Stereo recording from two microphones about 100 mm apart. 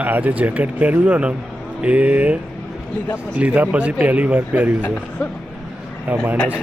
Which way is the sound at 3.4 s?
15° right (ahead or behind).